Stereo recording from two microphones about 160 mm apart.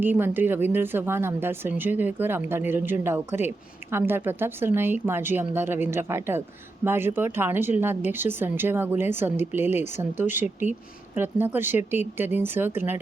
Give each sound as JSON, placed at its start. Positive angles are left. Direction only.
{"t": 0.0, "sound": "speech", "side_deg": -10}